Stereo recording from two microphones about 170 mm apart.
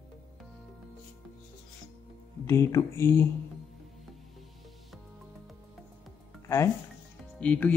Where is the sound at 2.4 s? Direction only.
15° left (ahead or behind).